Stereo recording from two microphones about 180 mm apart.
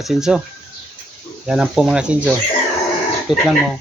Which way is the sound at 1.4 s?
5° right (ahead or behind).